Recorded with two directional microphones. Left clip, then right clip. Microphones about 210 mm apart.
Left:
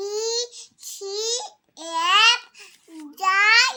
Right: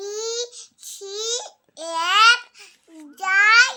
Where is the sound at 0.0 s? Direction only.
5° right (ahead or behind).